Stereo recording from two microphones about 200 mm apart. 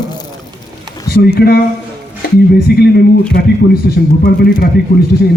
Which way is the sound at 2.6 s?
50° left (ahead or behind).